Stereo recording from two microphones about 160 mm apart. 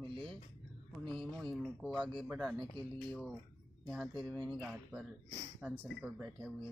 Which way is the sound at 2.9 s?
5° left (ahead or behind).